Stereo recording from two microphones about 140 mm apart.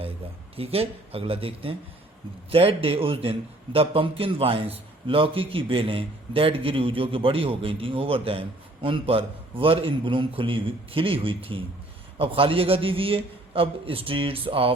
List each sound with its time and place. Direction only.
0.5 s a man's voice: 45° right (ahead or behind)